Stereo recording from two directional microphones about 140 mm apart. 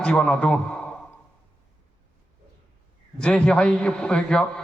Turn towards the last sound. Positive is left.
turn(degrees=5)  # may be behind; listen again after turning